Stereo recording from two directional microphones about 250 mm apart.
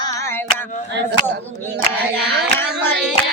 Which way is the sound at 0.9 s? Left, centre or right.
Right.